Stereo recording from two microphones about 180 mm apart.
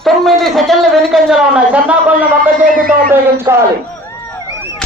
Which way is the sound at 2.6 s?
50° right (ahead or behind).